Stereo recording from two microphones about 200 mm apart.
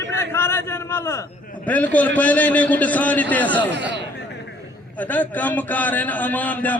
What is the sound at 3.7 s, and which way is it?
Speech, 60° right (ahead or behind).